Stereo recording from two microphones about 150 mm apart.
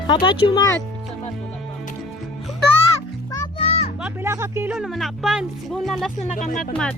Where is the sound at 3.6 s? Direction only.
45° left (ahead or behind).